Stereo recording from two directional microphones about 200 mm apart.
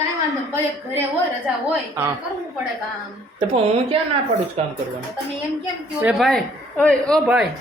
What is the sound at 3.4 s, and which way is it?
Speech, 30° right (ahead or behind).